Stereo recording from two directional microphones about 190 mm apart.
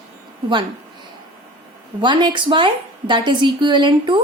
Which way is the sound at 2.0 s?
25° right (ahead or behind).